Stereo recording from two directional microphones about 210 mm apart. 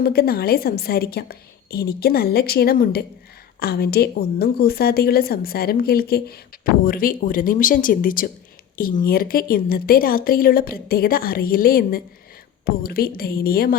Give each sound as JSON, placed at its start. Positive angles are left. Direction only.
{"t": 0.0, "sound": "a woman's voice", "side_deg": 45}